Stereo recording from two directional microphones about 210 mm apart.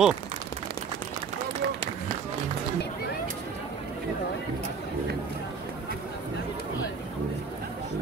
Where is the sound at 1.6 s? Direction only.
50° right (ahead or behind).